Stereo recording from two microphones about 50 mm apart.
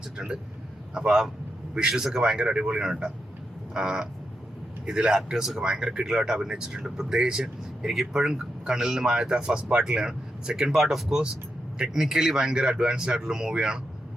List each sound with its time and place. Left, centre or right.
0.2 s speech: centre